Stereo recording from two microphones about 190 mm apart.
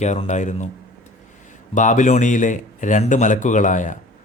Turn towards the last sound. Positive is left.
turn(degrees=40)  # may be behind; listen again after turning